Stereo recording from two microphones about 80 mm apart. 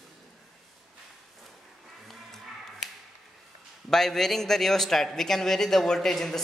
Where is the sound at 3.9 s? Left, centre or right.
Centre.